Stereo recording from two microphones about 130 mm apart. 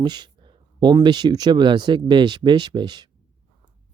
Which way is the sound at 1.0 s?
35° right (ahead or behind).